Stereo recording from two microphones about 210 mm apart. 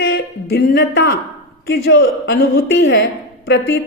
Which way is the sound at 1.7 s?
60° left (ahead or behind).